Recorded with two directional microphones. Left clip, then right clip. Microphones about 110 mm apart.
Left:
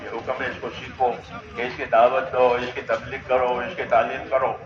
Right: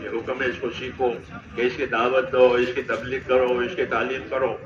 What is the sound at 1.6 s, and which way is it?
A man's voice, 45° left (ahead or behind).